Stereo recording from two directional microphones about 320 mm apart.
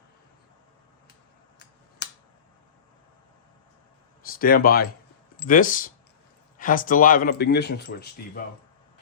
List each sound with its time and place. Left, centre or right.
4.3 s speech: left